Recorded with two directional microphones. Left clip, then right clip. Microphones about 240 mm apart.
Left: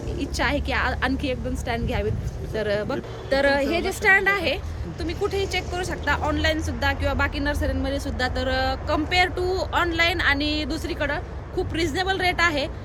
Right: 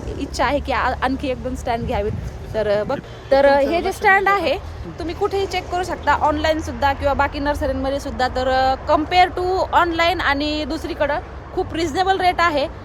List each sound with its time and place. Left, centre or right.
0.2 s speech: centre